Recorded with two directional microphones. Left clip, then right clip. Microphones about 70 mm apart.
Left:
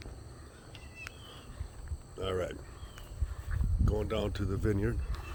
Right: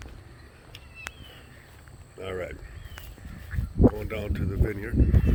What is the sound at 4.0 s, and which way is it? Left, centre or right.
Speech, left.